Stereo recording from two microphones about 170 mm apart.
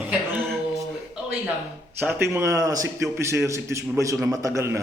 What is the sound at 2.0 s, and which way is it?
A man's voice, 10° right (ahead or behind).